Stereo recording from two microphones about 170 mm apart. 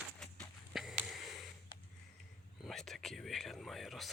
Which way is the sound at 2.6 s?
Centre (ahead or behind).